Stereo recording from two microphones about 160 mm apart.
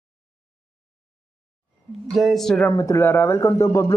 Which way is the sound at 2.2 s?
Centre (ahead or behind).